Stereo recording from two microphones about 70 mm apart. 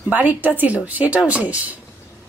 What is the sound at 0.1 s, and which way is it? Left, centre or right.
A woman's voice, right.